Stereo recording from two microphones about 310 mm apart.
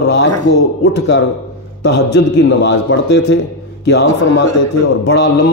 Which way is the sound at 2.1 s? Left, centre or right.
Left.